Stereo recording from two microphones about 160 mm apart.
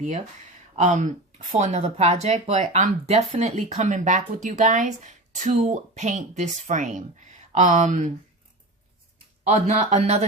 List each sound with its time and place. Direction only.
0.8 s speech: 50° right (ahead or behind)
9.4 s speech: 45° right (ahead or behind)